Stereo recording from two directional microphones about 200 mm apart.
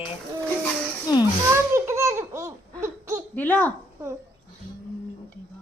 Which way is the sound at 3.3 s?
5° left (ahead or behind).